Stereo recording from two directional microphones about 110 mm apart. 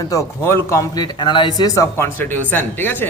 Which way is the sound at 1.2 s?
45° left (ahead or behind).